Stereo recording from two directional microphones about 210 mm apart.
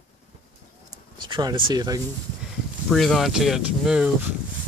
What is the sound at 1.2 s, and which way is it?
Speech, 20° right (ahead or behind).